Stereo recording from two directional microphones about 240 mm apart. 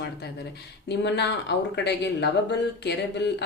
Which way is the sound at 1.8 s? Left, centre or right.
Left.